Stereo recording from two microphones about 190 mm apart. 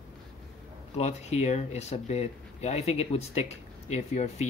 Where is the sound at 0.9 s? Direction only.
35° left (ahead or behind).